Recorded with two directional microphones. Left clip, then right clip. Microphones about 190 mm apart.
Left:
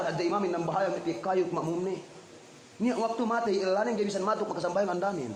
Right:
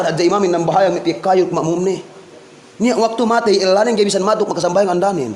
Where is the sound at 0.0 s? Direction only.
35° right (ahead or behind).